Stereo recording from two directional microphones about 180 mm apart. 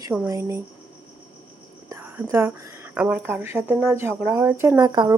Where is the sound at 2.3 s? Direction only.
10° right (ahead or behind).